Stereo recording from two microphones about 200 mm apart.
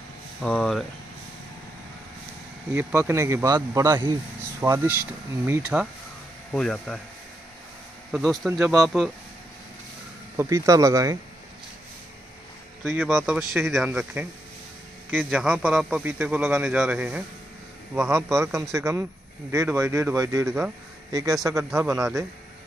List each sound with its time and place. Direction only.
0.4 s a man's voice: 5° left (ahead or behind)
2.7 s a man's voice: 10° right (ahead or behind)
8.1 s a man's voice: 5° right (ahead or behind)
10.3 s speech: 15° right (ahead or behind)
12.8 s a man's voice: 10° right (ahead or behind)
21.6 s a man's voice: centre (ahead or behind)